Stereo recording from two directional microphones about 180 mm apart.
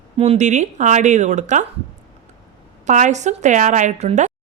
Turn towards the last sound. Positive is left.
turn(degrees=-40)  # may be behind; listen again after turning